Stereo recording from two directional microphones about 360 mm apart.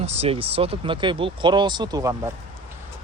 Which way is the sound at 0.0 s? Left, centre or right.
Centre.